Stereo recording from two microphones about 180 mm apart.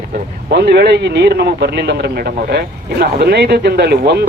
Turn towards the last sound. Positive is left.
turn(degrees=-65)  # may be behind; listen again after turning